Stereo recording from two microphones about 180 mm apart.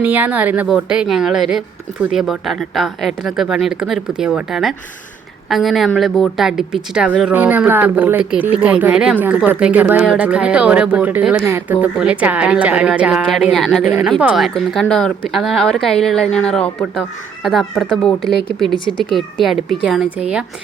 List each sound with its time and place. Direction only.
0.0 s speech: 10° right (ahead or behind)
18.7 s speech: 25° left (ahead or behind)
19.1 s speech: centre (ahead or behind)